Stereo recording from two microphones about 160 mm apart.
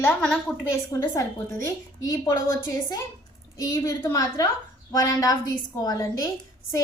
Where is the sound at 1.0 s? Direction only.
20° left (ahead or behind).